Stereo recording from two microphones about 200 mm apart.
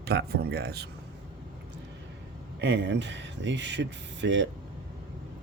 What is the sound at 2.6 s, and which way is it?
Speech, 60° right (ahead or behind).